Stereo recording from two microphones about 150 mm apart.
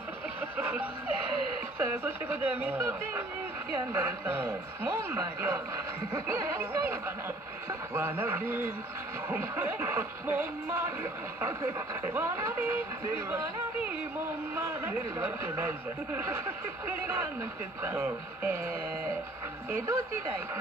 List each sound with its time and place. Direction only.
0.6 s music: 10° right (ahead or behind)
1.8 s speech: 10° right (ahead or behind)
12.1 s speech: 15° right (ahead or behind)
14.5 s speech: 15° right (ahead or behind)